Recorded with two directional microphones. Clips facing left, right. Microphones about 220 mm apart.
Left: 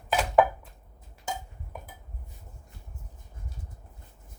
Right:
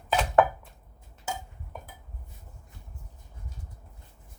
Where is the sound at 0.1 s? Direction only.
10° left (ahead or behind).